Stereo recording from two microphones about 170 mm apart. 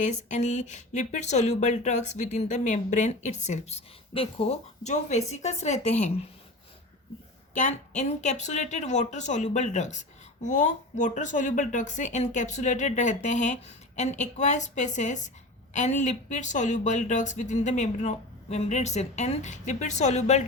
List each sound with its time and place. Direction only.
0.0 s a woman's voice: 45° left (ahead or behind)
7.5 s speech: 45° left (ahead or behind)